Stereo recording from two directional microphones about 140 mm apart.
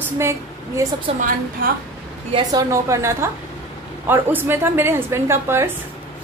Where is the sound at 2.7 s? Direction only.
20° right (ahead or behind).